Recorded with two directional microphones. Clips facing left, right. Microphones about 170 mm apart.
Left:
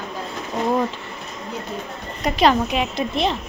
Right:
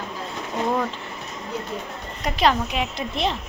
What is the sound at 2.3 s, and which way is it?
Speech, 15° left (ahead or behind).